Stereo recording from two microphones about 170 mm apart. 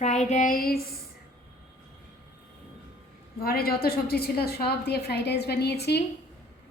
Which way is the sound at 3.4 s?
60° left (ahead or behind).